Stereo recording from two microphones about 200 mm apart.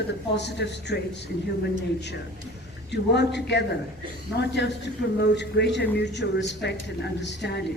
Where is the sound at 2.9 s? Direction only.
60° left (ahead or behind).